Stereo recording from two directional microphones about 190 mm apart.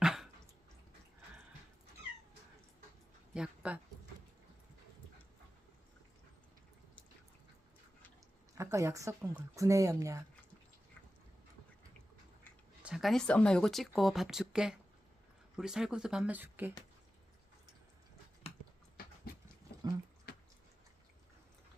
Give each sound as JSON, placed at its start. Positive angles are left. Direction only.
{"t": 0.0, "sound": "dog", "side_deg": 0}
{"t": 3.3, "sound": "speech", "side_deg": -5}
{"t": 8.5, "sound": "speech", "side_deg": -15}
{"t": 12.8, "sound": "speech", "side_deg": 0}
{"t": 19.0, "sound": "a sound", "side_deg": 50}
{"t": 20.3, "sound": "a sound", "side_deg": 55}